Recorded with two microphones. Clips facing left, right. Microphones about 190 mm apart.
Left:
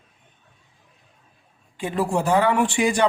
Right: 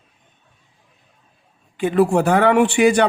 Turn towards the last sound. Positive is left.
turn(degrees=-65)  # may be behind; listen again after turning